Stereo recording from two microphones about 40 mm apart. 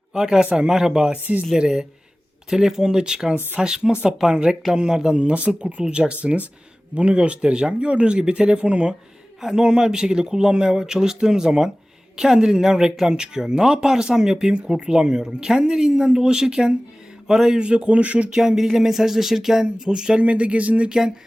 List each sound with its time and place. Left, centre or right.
0.1 s speech: centre
5.1 s speech: right
9.4 s speech: centre
17.6 s speech: right
18.3 s speech: centre
18.5 s speech: centre
19.8 s speech: right
20.2 s speech: right